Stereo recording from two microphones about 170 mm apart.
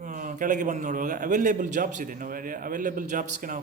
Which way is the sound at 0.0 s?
50° right (ahead or behind).